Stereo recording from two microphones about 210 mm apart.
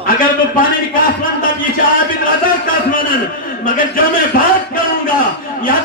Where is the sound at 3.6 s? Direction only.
40° left (ahead or behind).